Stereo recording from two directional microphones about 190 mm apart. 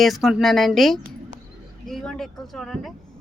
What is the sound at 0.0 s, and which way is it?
Speech, centre (ahead or behind).